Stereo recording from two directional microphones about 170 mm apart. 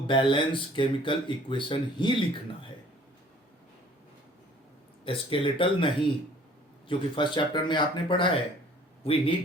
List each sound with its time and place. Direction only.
0.1 s speech: 30° left (ahead or behind)
5.0 s speech: 30° left (ahead or behind)